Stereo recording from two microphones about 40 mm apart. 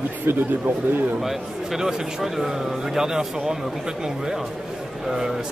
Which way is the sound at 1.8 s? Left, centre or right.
Centre.